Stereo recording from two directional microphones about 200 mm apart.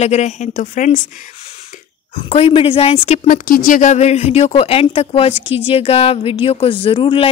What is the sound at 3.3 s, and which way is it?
A woman's voice, 45° left (ahead or behind).